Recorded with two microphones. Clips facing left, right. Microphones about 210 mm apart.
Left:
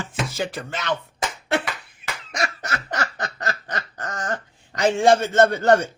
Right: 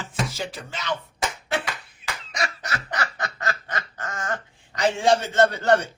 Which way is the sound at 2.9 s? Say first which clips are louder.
Left 2 dB; 40° left (ahead or behind).